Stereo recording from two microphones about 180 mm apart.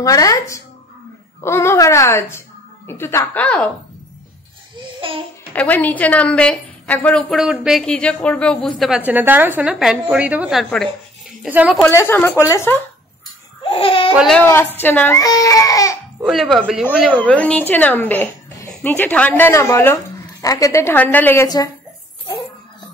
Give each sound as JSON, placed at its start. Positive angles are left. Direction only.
{"t": 0.0, "sound": "a child's voice", "side_deg": 20}
{"t": 5.0, "sound": "babbling", "side_deg": -30}
{"t": 5.5, "sound": "a woman's voice", "side_deg": 10}
{"t": 11.8, "sound": "a child's voice", "side_deg": 10}
{"t": 13.7, "sound": "speech", "side_deg": 30}
{"t": 14.1, "sound": "a woman's voice", "side_deg": 0}
{"t": 14.4, "sound": "a child's voice", "side_deg": 15}
{"t": 16.3, "sound": "a woman's voice", "side_deg": 0}